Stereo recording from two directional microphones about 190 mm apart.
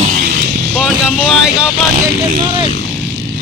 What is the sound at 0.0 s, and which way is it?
Vehicle, 50° right (ahead or behind).